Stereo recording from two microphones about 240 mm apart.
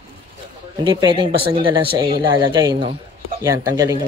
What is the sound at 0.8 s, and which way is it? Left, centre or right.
Speech, centre.